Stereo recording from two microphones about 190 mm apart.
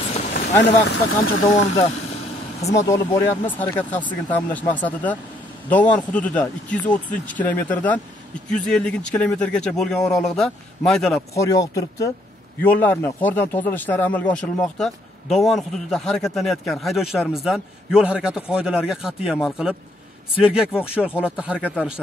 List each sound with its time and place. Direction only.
0.6 s speech: 65° left (ahead or behind)
2.7 s speech: 15° left (ahead or behind)
11.3 s speech: 15° left (ahead or behind); by 21.5 s 5° right (ahead or behind)
21.5 s speech: 10° left (ahead or behind)